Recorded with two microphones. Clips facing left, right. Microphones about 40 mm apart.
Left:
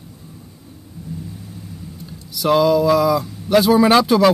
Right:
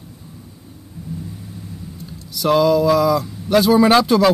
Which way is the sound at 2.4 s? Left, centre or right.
Centre.